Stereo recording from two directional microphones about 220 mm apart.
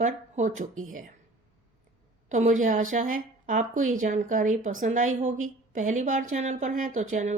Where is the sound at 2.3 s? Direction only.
35° right (ahead or behind).